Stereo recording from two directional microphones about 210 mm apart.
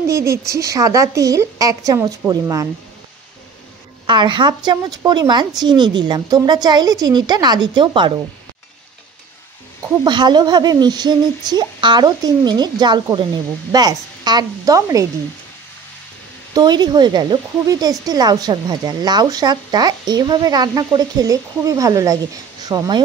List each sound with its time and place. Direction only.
0.0 s a woman's voice: 15° right (ahead or behind)
4.0 s speech: 20° right (ahead or behind)
10.0 s speech: 20° right (ahead or behind)
16.5 s speech: 20° right (ahead or behind)